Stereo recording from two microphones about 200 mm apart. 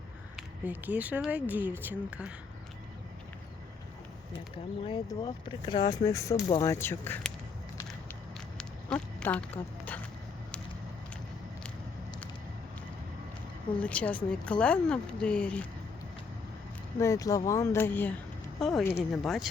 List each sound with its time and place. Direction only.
0.3 s speech: 10° right (ahead or behind)
4.9 s speech: 25° left (ahead or behind)
8.5 s a sound: 5° left (ahead or behind)
13.7 s speech: 5° left (ahead or behind)
17.0 s speech: 15° left (ahead or behind); by 19.5 s centre (ahead or behind)